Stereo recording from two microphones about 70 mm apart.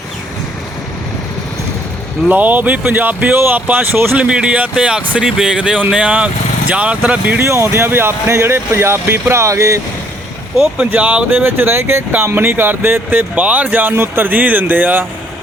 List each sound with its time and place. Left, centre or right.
2.3 s speech: right
4.2 s speech: centre
7.4 s speech: right
10.8 s speech: right
11.3 s speech: right